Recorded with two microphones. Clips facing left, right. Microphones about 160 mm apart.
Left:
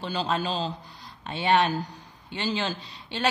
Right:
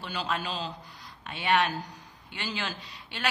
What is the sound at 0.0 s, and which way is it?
A man's voice, 30° left (ahead or behind).